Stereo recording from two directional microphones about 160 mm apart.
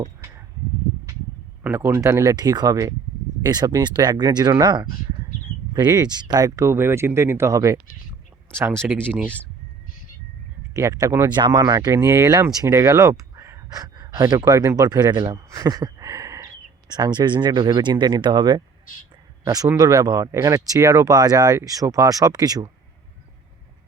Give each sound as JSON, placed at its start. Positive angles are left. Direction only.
{"t": 1.6, "sound": "speech", "side_deg": -15}
{"t": 10.8, "sound": "speech", "side_deg": -20}